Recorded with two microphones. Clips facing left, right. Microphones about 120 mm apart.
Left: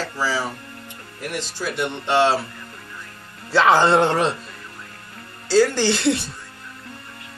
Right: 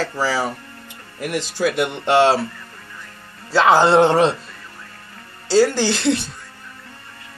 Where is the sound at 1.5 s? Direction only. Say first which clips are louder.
Right 10 dB; 60° right (ahead or behind).